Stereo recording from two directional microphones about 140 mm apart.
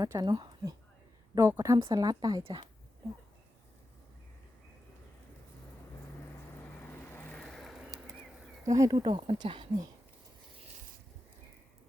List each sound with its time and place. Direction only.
0.0 s speech: 25° right (ahead or behind)
6.6 s vehicle: 15° left (ahead or behind); by 7.9 s 5° right (ahead or behind)
8.6 s speech: 25° right (ahead or behind)